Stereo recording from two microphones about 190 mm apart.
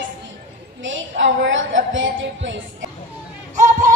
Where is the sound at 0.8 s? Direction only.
80° right.